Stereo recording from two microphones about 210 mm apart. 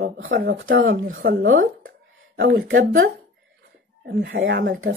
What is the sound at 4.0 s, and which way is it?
Speech, 60° right (ahead or behind).